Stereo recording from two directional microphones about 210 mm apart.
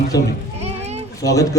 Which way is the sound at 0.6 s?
30° right (ahead or behind).